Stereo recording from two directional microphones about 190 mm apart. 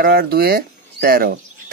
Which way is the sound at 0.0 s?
50° right (ahead or behind).